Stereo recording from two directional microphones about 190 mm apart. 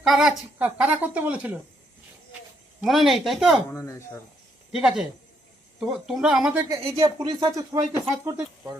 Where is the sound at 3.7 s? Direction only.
15° left (ahead or behind).